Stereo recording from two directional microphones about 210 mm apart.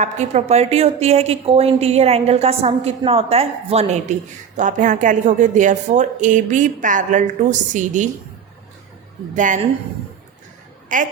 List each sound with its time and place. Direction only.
0.0 s a woman's voice: 30° right (ahead or behind)
9.3 s a woman's voice: 35° right (ahead or behind)
10.9 s a woman's voice: 40° right (ahead or behind)